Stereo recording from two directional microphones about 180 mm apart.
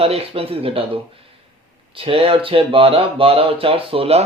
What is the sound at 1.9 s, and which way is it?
Speech, 30° right (ahead or behind).